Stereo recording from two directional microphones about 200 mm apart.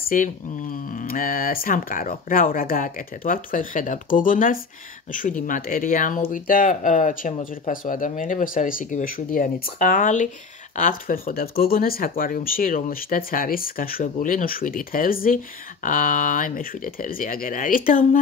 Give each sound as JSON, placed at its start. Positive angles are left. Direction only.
{"t": 0.1, "sound": "speech", "side_deg": 40}